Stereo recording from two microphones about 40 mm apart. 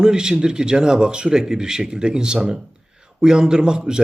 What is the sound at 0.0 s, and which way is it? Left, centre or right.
A man's voice, centre.